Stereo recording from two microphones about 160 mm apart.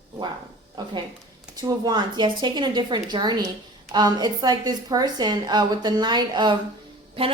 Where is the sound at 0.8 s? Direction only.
25° right (ahead or behind).